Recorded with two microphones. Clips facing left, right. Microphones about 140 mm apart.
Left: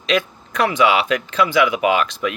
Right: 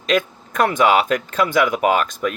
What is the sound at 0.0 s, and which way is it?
Speech, 45° right (ahead or behind).